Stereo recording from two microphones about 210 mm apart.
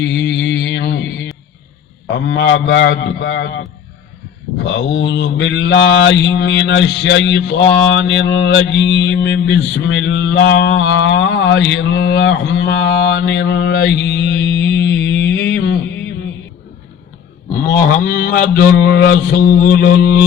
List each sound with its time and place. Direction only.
0.0 s a sound: 55° left (ahead or behind)
2.0 s mantra: 55° left (ahead or behind)
17.7 s mantra: 50° left (ahead or behind)
19.5 s mantra: 55° left (ahead or behind)